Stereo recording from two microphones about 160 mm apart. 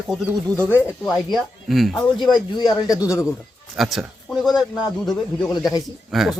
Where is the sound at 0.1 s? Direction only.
Centre (ahead or behind).